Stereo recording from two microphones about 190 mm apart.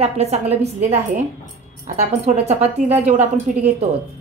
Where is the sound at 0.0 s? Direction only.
35° right (ahead or behind).